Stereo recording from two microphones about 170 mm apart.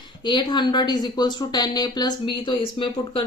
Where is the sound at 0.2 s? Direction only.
25° left (ahead or behind).